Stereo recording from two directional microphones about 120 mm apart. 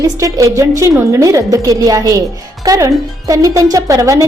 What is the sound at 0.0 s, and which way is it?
Speech, 30° right (ahead or behind).